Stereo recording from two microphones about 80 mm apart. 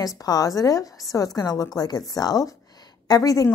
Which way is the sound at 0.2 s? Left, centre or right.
Left.